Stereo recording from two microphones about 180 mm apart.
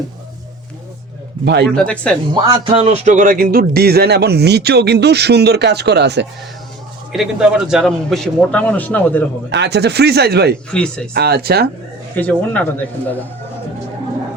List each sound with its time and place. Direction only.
1.7 s a man's voice: 5° left (ahead or behind)
2.3 s speech: 25° right (ahead or behind); by 6.2 s 70° right (ahead or behind)
7.1 s a man's voice: 5° right (ahead or behind)
9.5 s speech: 70° right (ahead or behind)
10.7 s a man's voice: 5° left (ahead or behind)
11.1 s speech: 60° right (ahead or behind)
12.1 s speech: 10° left (ahead or behind)